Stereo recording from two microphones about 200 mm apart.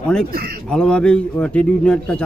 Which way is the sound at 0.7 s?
5° left (ahead or behind).